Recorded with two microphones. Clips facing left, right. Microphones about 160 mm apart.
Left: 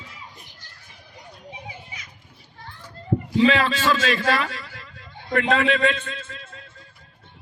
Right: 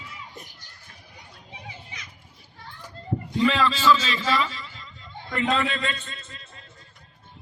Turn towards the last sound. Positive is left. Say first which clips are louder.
# left 7 dB
turn(degrees=55)  # may be behind; listen again after turning